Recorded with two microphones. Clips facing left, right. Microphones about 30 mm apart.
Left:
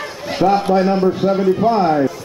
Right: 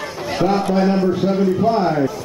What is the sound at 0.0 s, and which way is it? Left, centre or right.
A man's voice, centre.